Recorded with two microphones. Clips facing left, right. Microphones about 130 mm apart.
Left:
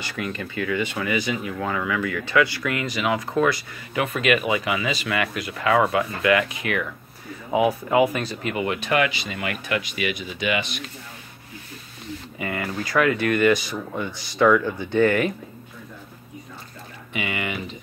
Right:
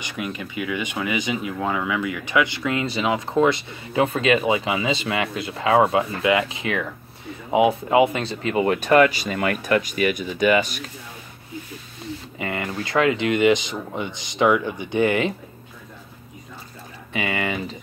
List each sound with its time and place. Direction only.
0.0 s speech: 15° right (ahead or behind)
8.6 s speech: 40° right (ahead or behind)
12.4 s speech: 25° right (ahead or behind)
17.1 s speech: 35° right (ahead or behind)